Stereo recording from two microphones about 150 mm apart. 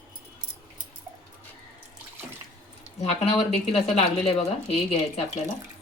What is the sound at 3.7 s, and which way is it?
Speech, 40° left (ahead or behind).